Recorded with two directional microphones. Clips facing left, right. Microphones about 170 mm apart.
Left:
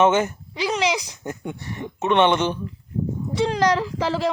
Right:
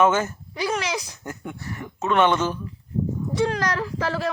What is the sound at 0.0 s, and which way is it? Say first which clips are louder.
Speech: left 2 dB; 20° left (ahead or behind).